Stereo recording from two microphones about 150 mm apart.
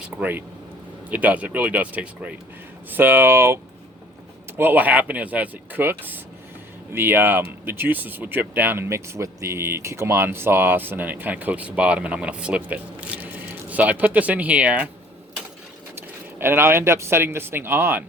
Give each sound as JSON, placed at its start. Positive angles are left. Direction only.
{"t": 0.2, "sound": "speech", "side_deg": -15}
{"t": 16.4, "sound": "speech", "side_deg": -15}